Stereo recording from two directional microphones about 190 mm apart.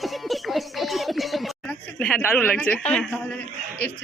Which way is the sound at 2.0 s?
5° left (ahead or behind).